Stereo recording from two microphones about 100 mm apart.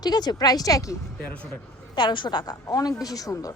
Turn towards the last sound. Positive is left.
turn(degrees=35)  # may be behind; listen again after turning